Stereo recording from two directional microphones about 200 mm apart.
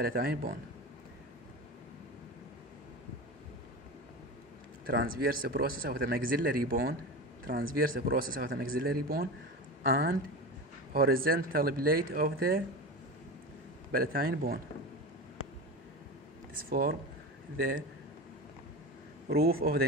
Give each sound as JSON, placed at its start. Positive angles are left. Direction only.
{"t": 0.0, "sound": "speech", "side_deg": -50}
{"t": 4.8, "sound": "speech", "side_deg": -50}
{"t": 13.9, "sound": "speech", "side_deg": -45}
{"t": 16.6, "sound": "speech", "side_deg": -45}
{"t": 19.2, "sound": "speech", "side_deg": -50}